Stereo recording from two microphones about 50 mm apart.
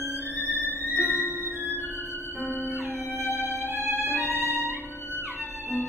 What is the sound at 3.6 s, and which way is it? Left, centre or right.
Violin, right.